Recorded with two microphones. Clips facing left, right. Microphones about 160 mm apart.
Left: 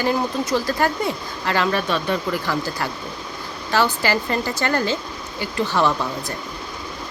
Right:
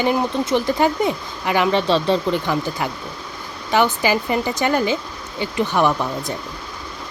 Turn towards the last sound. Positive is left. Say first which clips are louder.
# right 2 dB
turn(degrees=-15)  # may be behind; listen again after turning